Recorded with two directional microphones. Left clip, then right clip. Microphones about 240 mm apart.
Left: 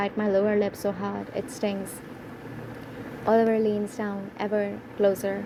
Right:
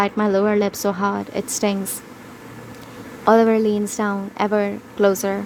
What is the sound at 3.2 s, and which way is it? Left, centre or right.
Speech, right.